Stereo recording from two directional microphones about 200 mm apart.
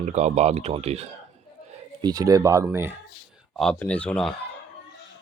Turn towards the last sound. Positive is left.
turn(degrees=5)  # may be behind; listen again after turning